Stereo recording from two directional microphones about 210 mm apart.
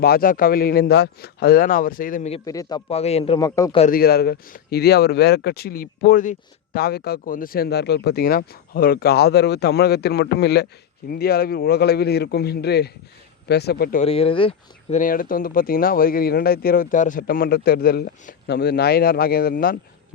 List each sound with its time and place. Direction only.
0.0 s speech: 45° left (ahead or behind)
2.4 s a man's voice: 20° left (ahead or behind)
3.8 s speech: 40° left (ahead or behind)
14.0 s speech: 25° left (ahead or behind); by 19.7 s 45° left (ahead or behind)